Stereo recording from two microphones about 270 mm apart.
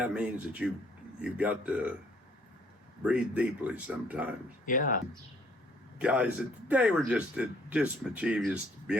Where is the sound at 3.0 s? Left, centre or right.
Centre.